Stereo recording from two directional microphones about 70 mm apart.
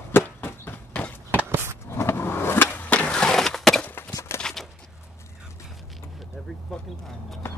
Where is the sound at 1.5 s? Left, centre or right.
Right.